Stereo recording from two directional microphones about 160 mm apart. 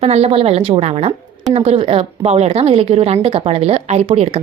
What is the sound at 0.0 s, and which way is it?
A woman's voice, 40° right (ahead or behind).